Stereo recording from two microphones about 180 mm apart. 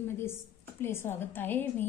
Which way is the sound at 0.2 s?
15° left (ahead or behind).